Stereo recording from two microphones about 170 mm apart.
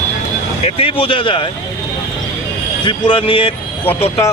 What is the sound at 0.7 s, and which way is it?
Speech, 35° left (ahead or behind).